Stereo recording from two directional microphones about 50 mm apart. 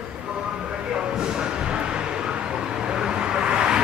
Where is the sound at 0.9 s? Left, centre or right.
Centre.